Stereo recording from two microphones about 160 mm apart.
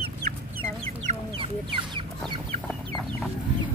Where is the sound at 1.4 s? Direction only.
30° right (ahead or behind).